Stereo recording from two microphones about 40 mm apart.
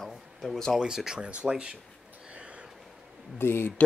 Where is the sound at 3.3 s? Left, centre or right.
Left.